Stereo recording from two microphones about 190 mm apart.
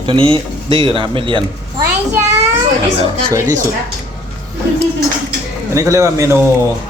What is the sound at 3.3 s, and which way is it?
Speech, 15° right (ahead or behind).